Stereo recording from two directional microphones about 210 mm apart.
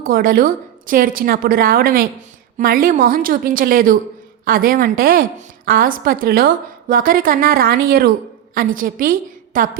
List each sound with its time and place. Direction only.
0.0 s a woman's voice: 45° right (ahead or behind)